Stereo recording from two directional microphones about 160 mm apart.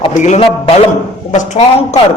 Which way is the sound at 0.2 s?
45° left (ahead or behind).